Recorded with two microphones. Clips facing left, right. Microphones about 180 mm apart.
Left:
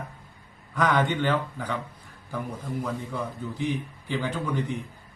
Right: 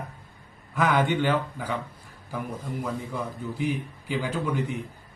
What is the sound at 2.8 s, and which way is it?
Speech, 10° right (ahead or behind).